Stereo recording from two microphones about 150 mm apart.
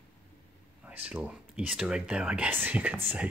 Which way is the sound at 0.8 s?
10° right (ahead or behind).